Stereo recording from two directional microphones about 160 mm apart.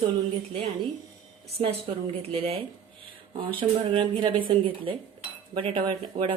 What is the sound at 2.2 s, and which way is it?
Speech, 35° right (ahead or behind).